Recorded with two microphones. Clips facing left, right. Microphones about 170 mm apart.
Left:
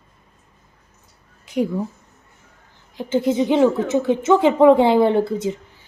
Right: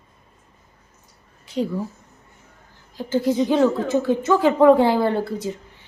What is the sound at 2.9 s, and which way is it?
Speech, 20° left (ahead or behind).